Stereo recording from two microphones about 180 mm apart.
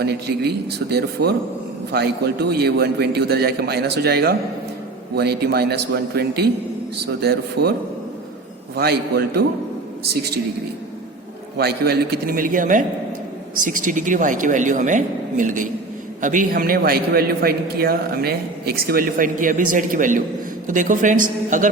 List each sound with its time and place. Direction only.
0.0 s a man's voice: 65° right (ahead or behind)
11.5 s a man's voice: 60° right (ahead or behind)